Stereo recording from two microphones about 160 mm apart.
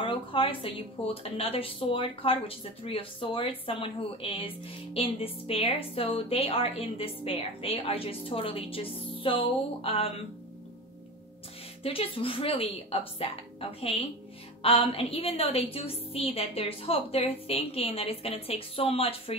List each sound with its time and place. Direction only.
0.0 s a woman's voice: 35° left (ahead or behind)
11.8 s a woman's voice: 35° left (ahead or behind)